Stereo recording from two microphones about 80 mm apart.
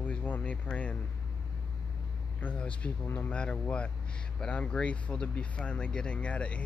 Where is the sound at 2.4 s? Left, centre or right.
Centre.